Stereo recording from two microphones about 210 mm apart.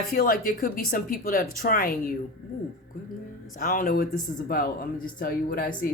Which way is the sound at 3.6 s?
40° left (ahead or behind).